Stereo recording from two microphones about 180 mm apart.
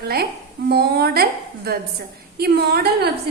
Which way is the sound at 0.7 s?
60° right (ahead or behind).